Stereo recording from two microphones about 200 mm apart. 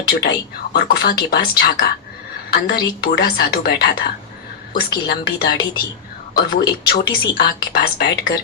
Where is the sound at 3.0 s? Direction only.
50° left (ahead or behind).